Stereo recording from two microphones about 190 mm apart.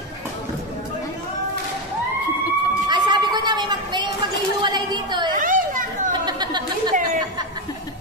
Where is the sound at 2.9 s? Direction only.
25° right (ahead or behind).